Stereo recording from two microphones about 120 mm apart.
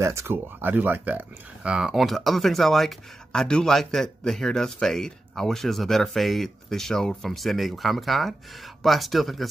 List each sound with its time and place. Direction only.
0.0 s speech: 25° right (ahead or behind); by 9.5 s centre (ahead or behind)